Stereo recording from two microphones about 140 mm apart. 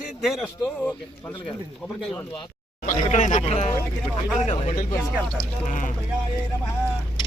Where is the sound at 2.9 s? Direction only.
60° left (ahead or behind).